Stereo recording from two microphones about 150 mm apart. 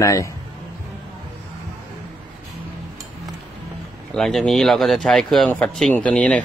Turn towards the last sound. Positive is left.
turn(degrees=10)  # may be behind; listen again after turning